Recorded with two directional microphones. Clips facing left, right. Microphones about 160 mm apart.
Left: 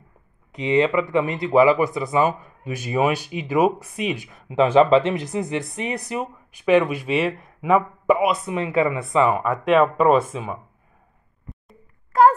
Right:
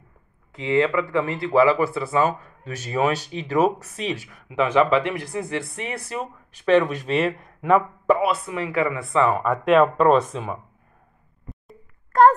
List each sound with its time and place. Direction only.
0.5 s speech: 20° left (ahead or behind)
4.3 s speech: 25° left (ahead or behind)
9.4 s speech: centre (ahead or behind)
11.4 s a sound: centre (ahead or behind)